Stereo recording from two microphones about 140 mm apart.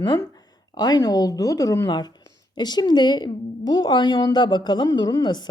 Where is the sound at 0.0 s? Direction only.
30° left (ahead or behind).